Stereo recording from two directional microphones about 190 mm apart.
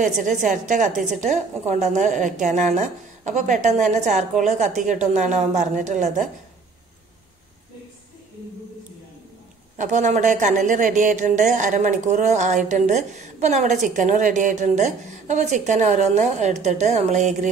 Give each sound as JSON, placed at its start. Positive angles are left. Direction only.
{"t": 0.0, "sound": "speech", "side_deg": -40}
{"t": 9.8, "sound": "speech", "side_deg": -40}